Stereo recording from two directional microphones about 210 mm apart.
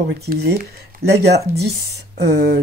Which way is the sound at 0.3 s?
45° right (ahead or behind).